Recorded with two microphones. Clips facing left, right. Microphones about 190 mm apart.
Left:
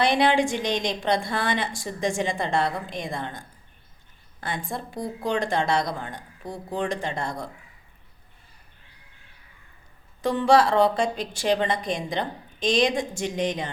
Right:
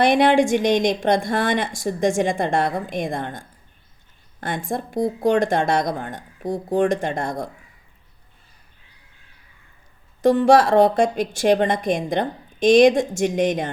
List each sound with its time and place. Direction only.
0.0 s a woman's voice: 50° right (ahead or behind)
10.2 s a woman's voice: 45° right (ahead or behind)